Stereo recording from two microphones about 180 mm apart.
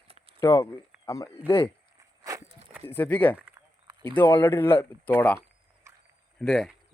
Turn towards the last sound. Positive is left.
turn(degrees=0)  # may be behind; listen again after turning